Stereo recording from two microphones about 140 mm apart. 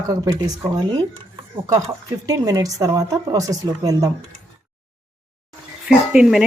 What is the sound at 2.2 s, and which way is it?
A woman's voice, 25° right (ahead or behind).